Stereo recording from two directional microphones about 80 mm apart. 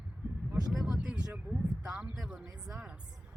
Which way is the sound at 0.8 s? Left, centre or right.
Centre.